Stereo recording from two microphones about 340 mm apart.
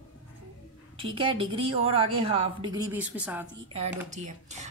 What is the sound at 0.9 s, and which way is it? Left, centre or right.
A woman's voice, centre.